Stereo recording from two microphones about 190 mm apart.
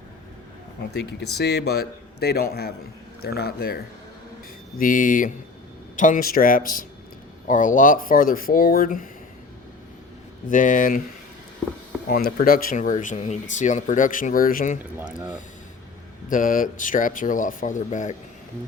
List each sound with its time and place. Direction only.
0.9 s speech: 60° left (ahead or behind)
4.8 s speech: 45° left (ahead or behind)
10.5 s speech: 45° left (ahead or behind)
12.0 s speech: 50° left (ahead or behind)
14.9 s speech: 5° right (ahead or behind)
16.3 s speech: 45° left (ahead or behind)